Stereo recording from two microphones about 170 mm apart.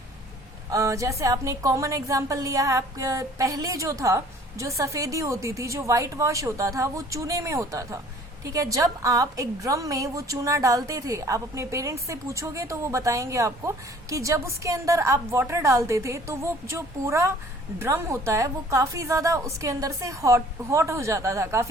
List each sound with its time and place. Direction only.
0.7 s a woman's voice: 20° right (ahead or behind)